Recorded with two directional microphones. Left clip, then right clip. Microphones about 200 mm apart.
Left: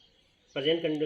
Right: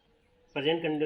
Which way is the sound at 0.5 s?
30° right (ahead or behind).